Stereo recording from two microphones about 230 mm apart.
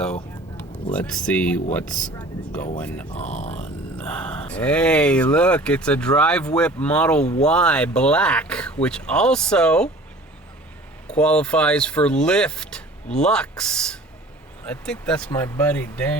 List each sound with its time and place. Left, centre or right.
0.5 s speech: centre
3.1 s speech: left
3.9 s speech: centre
11.1 s speech: centre